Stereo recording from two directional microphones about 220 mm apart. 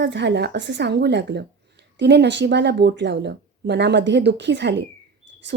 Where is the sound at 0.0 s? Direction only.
50° right (ahead or behind).